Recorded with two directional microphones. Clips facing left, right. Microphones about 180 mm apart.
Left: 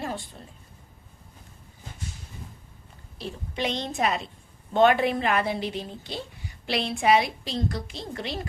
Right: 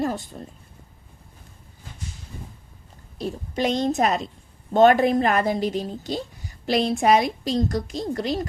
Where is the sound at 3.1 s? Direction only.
45° right (ahead or behind).